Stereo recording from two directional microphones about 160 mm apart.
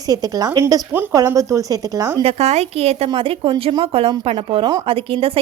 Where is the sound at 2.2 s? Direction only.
40° right (ahead or behind).